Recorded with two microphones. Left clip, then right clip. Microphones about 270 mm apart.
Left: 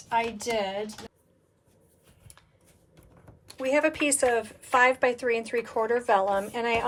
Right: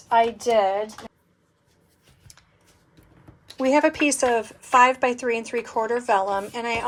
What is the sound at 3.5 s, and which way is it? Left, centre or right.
A woman's voice, centre.